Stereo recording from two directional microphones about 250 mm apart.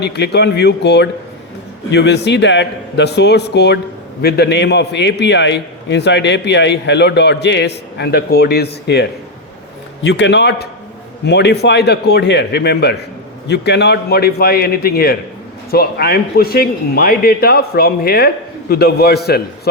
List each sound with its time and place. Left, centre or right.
0.0 s a man's voice: left